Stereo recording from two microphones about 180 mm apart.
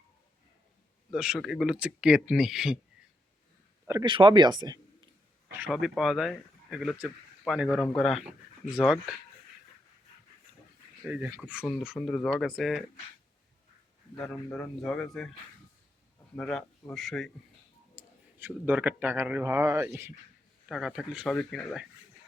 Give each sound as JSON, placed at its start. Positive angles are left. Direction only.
{"t": 1.1, "sound": "speech", "side_deg": -5}
{"t": 3.8, "sound": "a man's voice", "side_deg": -20}
{"t": 5.5, "sound": "speech", "side_deg": -10}
{"t": 11.0, "sound": "speech", "side_deg": -10}
{"t": 14.2, "sound": "speech", "side_deg": 0}
{"t": 16.3, "sound": "speech", "side_deg": 5}
{"t": 17.9, "sound": "a man's voice", "side_deg": -10}
{"t": 20.7, "sound": "speech", "side_deg": 0}